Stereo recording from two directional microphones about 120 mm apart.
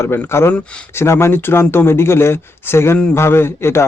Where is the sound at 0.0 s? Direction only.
20° left (ahead or behind).